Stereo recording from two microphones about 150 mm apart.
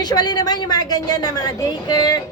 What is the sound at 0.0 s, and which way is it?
A woman's voice, 30° left (ahead or behind).